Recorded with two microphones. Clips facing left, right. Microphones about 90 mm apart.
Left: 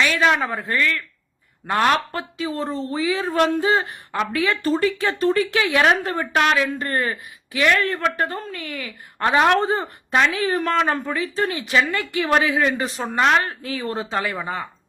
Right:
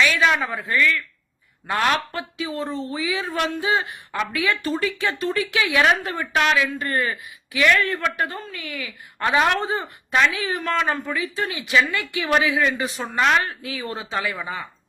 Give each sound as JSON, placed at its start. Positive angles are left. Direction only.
{"t": 0.0, "sound": "a woman's voice", "side_deg": 35}
{"t": 9.1, "sound": "a woman's voice", "side_deg": 30}